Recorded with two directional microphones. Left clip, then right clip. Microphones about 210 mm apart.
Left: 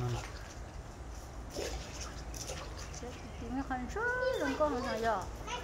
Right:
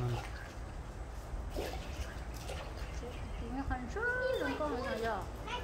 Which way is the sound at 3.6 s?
30° left (ahead or behind).